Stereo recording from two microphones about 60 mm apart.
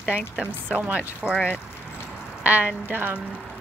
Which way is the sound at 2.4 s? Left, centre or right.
Right.